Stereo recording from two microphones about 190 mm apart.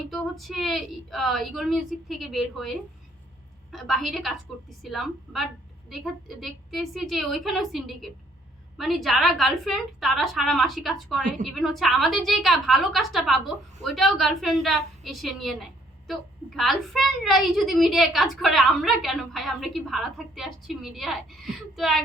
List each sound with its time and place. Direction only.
0.1 s a woman's voice: centre (ahead or behind)
16.6 s a woman's voice: centre (ahead or behind)